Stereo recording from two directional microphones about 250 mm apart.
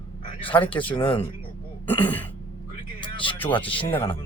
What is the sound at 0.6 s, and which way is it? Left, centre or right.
Speech, left.